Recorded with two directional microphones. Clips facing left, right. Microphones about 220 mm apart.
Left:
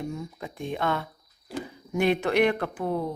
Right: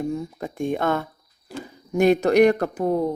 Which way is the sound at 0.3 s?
45° right (ahead or behind).